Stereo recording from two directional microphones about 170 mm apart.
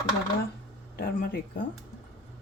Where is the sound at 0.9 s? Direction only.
65° left (ahead or behind).